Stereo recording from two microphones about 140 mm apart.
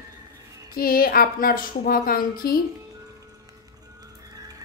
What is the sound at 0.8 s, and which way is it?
A woman's voice, 90° left.